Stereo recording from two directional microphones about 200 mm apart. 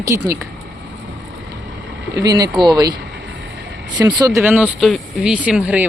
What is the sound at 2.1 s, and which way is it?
Speech, 20° right (ahead or behind).